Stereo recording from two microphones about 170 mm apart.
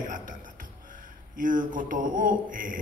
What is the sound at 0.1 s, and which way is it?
Music, 55° right (ahead or behind).